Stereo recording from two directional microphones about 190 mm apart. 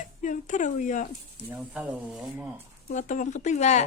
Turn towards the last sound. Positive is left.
turn(degrees=35)  # may be behind; listen again after turning